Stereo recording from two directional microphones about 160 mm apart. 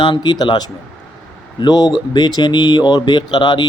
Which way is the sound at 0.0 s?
30° left (ahead or behind).